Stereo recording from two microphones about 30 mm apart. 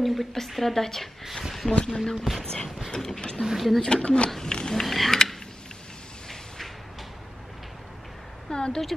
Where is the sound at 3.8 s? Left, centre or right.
Left.